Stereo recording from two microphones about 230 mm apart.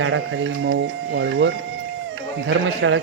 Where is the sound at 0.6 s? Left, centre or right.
Right.